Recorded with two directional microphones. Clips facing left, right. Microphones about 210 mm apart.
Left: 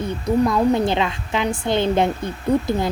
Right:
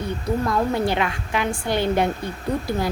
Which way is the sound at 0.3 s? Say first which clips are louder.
Left 6 dB; 20° left (ahead or behind).